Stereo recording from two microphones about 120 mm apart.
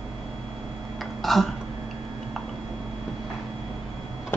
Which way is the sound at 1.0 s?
Centre (ahead or behind).